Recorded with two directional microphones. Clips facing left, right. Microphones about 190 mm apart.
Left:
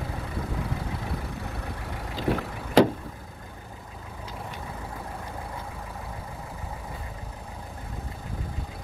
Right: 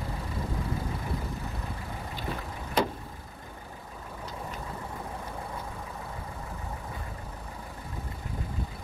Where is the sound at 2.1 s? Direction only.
90° left.